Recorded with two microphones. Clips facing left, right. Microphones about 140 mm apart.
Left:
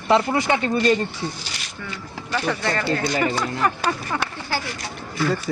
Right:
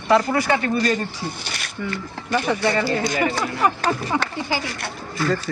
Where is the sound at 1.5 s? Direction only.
55° right (ahead or behind).